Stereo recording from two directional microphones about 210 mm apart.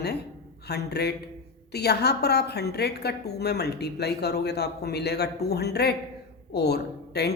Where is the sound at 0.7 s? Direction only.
50° left (ahead or behind).